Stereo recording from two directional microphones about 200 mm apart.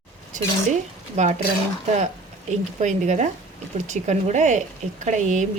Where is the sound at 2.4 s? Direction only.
35° right (ahead or behind).